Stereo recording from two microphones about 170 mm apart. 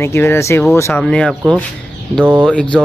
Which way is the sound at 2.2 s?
10° right (ahead or behind).